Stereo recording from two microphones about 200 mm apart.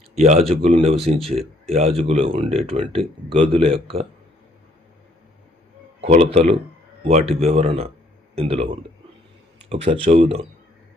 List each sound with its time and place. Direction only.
0.2 s speech: 35° right (ahead or behind)
6.0 s speech: 30° right (ahead or behind)